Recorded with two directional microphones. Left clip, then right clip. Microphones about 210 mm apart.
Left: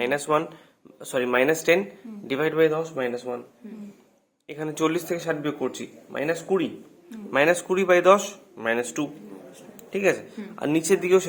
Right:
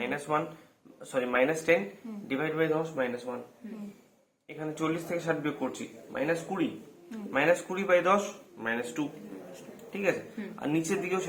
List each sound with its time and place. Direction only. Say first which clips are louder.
0.0 s speech: left 7 dB; 55° left (ahead or behind)
4.4 s speech: left 7 dB; 50° left (ahead or behind)